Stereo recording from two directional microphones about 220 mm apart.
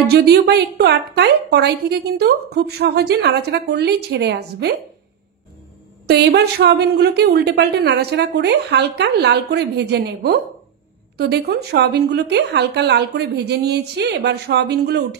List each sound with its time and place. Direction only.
0.1 s a woman's voice: 45° right (ahead or behind)
6.0 s a woman's voice: 50° right (ahead or behind)